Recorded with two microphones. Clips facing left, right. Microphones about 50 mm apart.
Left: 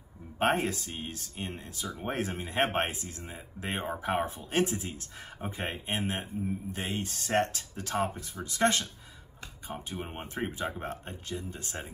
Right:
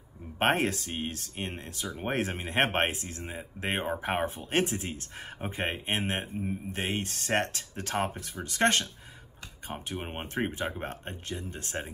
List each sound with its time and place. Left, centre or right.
0.4 s speech: right